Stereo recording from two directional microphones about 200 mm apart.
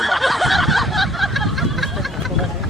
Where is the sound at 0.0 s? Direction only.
Centre (ahead or behind).